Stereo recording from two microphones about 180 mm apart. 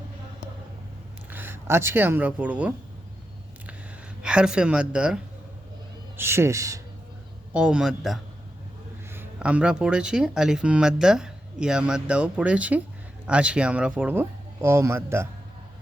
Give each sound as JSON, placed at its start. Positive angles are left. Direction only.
{"t": 1.3, "sound": "speech", "side_deg": -10}
{"t": 4.2, "sound": "speech", "side_deg": -5}
{"t": 7.5, "sound": "speech", "side_deg": -5}